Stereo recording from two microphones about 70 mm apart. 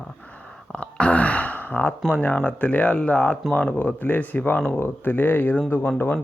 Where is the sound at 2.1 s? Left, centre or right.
Left.